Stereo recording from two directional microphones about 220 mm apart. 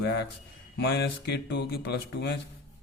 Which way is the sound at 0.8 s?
50° left (ahead or behind).